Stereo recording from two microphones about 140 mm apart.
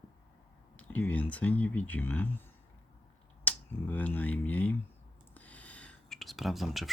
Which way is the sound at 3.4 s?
15° left (ahead or behind).